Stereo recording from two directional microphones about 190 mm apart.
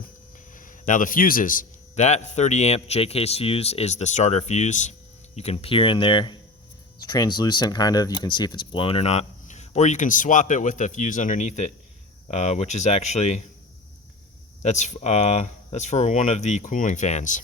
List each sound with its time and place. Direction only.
0.5 s a man's voice: 45° left (ahead or behind)
14.6 s a man's voice: 35° left (ahead or behind)